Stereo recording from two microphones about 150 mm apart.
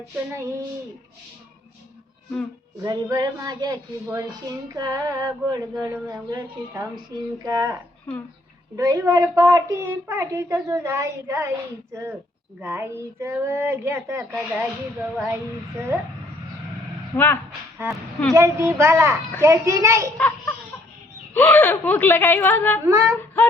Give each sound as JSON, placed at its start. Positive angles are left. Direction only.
{"t": 2.8, "sound": "a child's voice", "side_deg": -25}
{"t": 7.4, "sound": "a child's voice", "side_deg": -20}
{"t": 12.5, "sound": "speech", "side_deg": -15}
{"t": 17.2, "sound": "speech", "side_deg": 15}
{"t": 18.3, "sound": "a child's voice", "side_deg": -20}
{"t": 20.1, "sound": "speech", "side_deg": 10}
{"t": 22.9, "sound": "a child's voice", "side_deg": -20}